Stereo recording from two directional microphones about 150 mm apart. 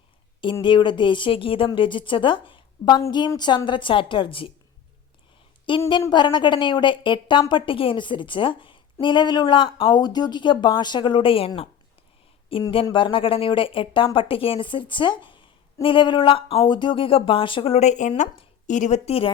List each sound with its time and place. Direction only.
0.6 s a woman's voice: 30° left (ahead or behind)
6.0 s a woman's voice: 30° left (ahead or behind)
12.7 s a woman's voice: 35° left (ahead or behind)